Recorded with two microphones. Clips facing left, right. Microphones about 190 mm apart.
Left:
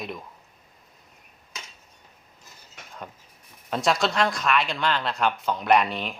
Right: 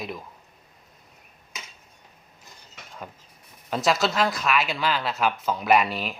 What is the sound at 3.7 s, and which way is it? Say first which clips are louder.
Speech: right 1 dB; centre (ahead or behind).